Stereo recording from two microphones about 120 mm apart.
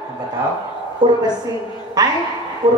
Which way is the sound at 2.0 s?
35° right (ahead or behind).